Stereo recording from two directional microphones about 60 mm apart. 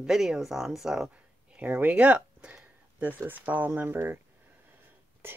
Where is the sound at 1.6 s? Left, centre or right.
Right.